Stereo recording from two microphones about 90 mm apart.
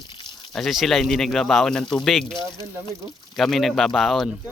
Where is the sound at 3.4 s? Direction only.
Centre (ahead or behind).